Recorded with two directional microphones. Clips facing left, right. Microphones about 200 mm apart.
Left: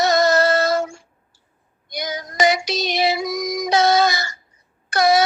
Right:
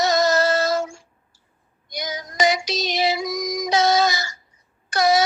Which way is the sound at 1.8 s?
60° left (ahead or behind).